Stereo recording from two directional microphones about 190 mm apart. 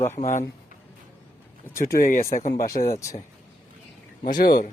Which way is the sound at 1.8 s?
50° left (ahead or behind).